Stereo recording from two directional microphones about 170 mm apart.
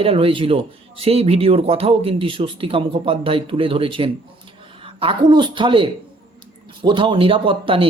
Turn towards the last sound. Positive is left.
turn(degrees=-30)  # may be behind; listen again after turning